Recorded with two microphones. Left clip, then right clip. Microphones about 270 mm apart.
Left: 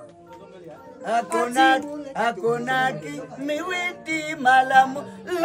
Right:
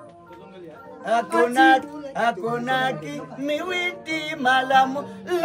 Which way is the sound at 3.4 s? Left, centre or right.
Centre.